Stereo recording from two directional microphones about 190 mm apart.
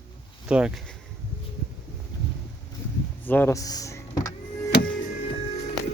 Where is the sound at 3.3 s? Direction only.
10° left (ahead or behind).